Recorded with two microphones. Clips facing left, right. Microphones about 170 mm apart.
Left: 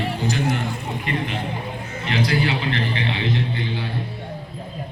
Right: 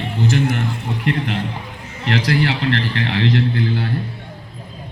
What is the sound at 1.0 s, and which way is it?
A man's voice, 70° right (ahead or behind).